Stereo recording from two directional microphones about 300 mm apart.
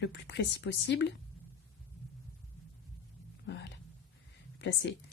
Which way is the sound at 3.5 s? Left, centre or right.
Left.